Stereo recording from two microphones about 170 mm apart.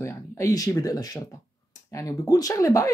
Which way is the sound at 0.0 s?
20° left (ahead or behind).